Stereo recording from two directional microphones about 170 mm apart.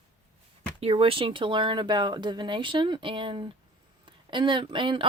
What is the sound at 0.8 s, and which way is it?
Speech, 35° right (ahead or behind).